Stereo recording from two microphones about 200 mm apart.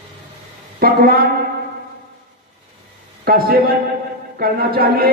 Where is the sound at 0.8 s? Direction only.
50° right (ahead or behind).